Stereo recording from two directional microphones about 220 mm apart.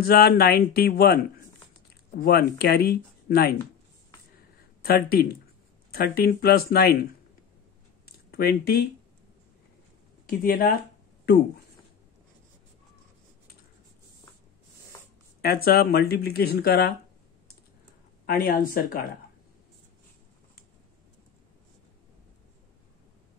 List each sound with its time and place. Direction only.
0.0 s speech: 45° left (ahead or behind)
2.2 s speech: 45° left (ahead or behind)
4.8 s speech: 45° left (ahead or behind)
8.0 s a sound: 45° left (ahead or behind)
10.2 s speech: 40° left (ahead or behind)
15.4 s speech: 45° left (ahead or behind)
18.2 s speech: 40° left (ahead or behind)